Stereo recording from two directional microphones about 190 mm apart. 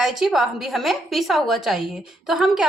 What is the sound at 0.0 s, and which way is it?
A woman's voice, centre (ahead or behind).